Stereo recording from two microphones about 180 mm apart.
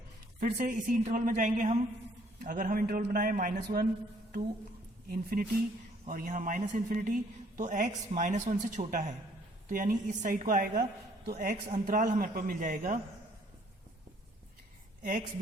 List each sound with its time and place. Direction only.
0.3 s speech: 50° right (ahead or behind)
5.0 s speech: 55° right (ahead or behind)